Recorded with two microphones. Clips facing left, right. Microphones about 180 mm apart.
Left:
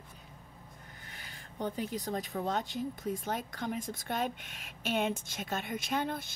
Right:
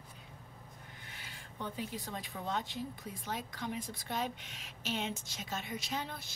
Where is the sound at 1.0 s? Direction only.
45° left (ahead or behind).